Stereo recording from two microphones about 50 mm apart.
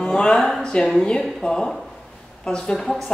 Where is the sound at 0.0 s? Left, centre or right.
Centre.